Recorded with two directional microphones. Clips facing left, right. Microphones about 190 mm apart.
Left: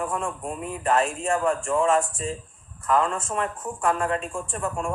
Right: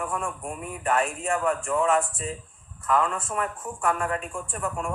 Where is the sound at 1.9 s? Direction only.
40° left (ahead or behind).